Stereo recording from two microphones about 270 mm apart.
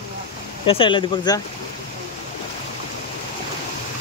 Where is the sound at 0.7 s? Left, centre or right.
Centre.